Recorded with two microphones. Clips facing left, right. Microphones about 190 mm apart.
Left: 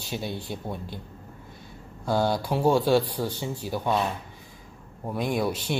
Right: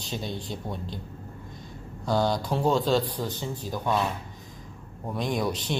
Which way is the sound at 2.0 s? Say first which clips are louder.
Left 1 dB; 10° left (ahead or behind).